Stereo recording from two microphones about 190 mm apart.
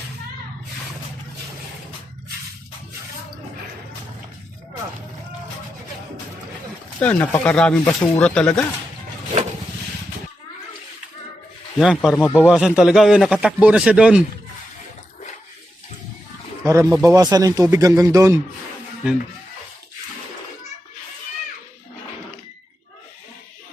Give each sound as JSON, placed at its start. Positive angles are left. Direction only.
{"t": 7.0, "sound": "a man's voice", "side_deg": 5}
{"t": 11.8, "sound": "a man's voice", "side_deg": 0}
{"t": 12.5, "sound": "a man's voice", "side_deg": -5}
{"t": 16.6, "sound": "speech", "side_deg": -15}